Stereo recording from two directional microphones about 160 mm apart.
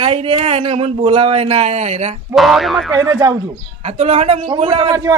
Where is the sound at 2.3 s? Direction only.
Centre (ahead or behind).